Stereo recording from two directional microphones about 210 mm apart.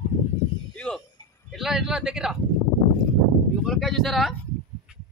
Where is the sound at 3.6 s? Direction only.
Centre (ahead or behind).